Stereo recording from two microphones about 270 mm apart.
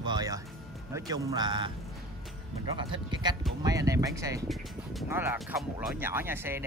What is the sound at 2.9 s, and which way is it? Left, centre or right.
Speech, centre.